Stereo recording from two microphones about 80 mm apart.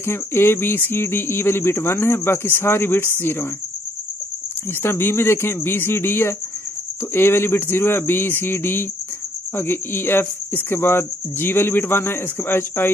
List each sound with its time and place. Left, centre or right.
0.0 s speech: left
4.8 s speech: left
7.2 s cricket: left